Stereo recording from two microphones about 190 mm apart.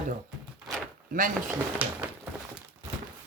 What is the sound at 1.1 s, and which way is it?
Speech, 45° right (ahead or behind).